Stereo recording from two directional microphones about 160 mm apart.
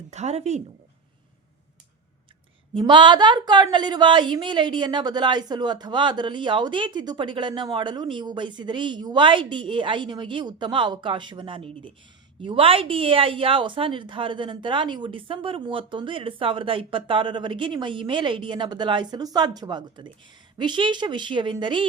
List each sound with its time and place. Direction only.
0.1 s speech: 45° right (ahead or behind)
2.7 s a woman's voice: 30° right (ahead or behind)